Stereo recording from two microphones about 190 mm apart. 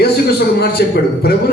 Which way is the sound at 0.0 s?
55° left (ahead or behind).